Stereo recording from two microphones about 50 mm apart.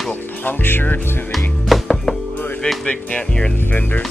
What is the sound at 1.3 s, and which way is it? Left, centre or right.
Music, centre.